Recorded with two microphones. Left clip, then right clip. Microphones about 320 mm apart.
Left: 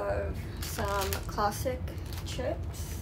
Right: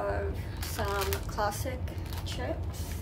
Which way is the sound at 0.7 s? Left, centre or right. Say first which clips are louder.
Even; centre.